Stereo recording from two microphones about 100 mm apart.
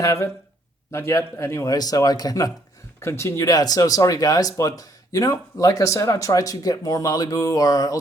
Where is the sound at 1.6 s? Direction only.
40° left (ahead or behind).